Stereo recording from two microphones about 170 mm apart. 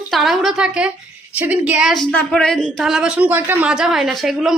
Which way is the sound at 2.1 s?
5° left (ahead or behind).